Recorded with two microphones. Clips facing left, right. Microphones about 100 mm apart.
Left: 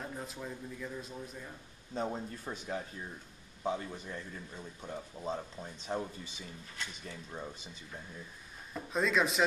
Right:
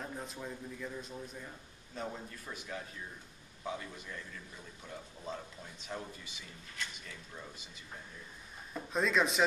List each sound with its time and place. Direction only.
0.0 s a man's voice: centre (ahead or behind)
2.0 s speech: 30° left (ahead or behind)
8.7 s a man's voice: centre (ahead or behind)